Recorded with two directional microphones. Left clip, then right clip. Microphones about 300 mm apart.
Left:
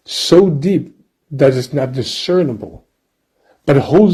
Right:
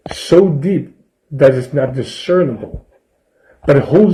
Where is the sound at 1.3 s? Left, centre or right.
Left.